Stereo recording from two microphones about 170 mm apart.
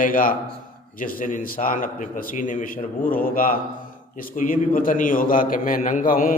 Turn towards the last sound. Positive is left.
turn(degrees=55)  # may be behind; listen again after turning